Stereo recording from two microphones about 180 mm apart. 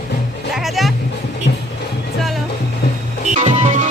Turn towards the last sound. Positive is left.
turn(degrees=-40)  # may be behind; listen again after turning